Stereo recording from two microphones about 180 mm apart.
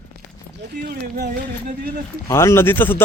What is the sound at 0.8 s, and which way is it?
Speech, 60° right (ahead or behind).